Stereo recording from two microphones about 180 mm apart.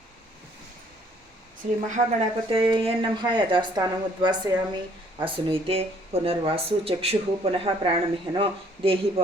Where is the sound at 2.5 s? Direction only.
30° right (ahead or behind).